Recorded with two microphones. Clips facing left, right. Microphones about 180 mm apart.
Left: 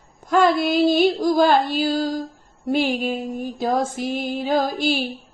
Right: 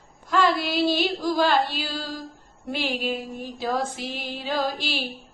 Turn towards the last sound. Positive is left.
turn(degrees=50)  # may be behind; listen again after turning